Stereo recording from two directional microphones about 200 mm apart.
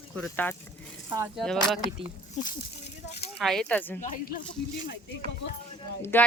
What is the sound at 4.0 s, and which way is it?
Speech, 40° left (ahead or behind).